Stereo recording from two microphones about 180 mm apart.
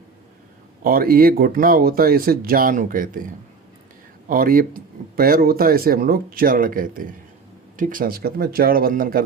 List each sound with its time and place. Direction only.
0.9 s speech: 55° right (ahead or behind)
4.3 s speech: 55° right (ahead or behind)